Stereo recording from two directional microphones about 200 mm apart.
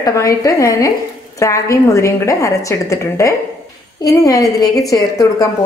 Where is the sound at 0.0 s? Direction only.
15° left (ahead or behind).